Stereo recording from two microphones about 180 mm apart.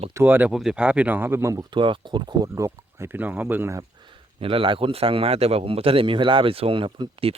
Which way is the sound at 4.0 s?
25° right (ahead or behind).